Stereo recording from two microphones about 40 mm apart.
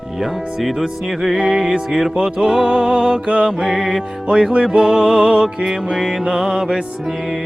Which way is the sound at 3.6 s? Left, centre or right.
Centre.